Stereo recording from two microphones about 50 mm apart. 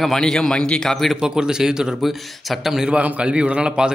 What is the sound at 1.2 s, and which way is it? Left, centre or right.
Speech, centre.